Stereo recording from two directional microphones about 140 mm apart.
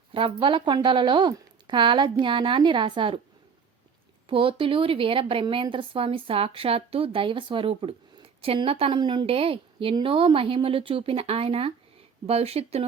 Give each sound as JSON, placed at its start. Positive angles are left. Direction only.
{"t": 0.1, "sound": "a woman's voice", "side_deg": -40}
{"t": 4.3, "sound": "a woman's voice", "side_deg": -40}